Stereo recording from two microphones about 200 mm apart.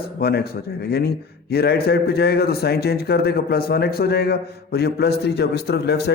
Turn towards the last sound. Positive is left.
turn(degrees=55)  # may be behind; listen again after turning